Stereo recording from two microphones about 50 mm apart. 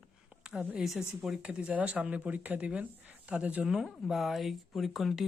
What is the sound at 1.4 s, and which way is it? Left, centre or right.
Speech, right.